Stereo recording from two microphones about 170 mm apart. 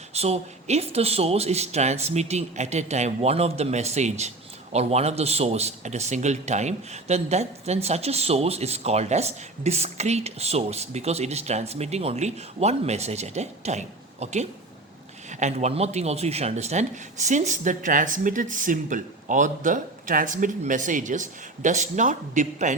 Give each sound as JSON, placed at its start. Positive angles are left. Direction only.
{"t": 0.1, "sound": "a man's voice", "side_deg": -40}